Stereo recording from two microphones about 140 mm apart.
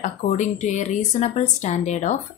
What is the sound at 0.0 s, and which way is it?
A woman's voice, 60° left (ahead or behind).